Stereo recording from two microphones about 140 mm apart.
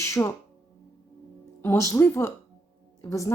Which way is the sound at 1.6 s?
20° left (ahead or behind).